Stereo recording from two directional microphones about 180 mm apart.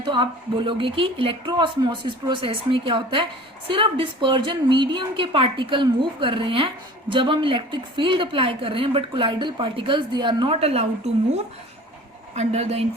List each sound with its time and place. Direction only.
0.0 s a woman's voice: 25° right (ahead or behind)